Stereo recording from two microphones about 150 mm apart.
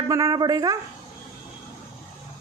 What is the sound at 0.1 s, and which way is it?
Speech, 20° right (ahead or behind).